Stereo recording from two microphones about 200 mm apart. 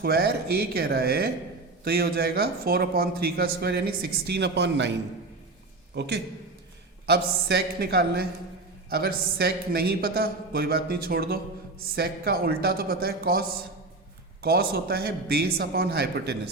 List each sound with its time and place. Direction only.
0.0 s a man's voice: 50° right (ahead or behind)
14.4 s speech: 50° right (ahead or behind)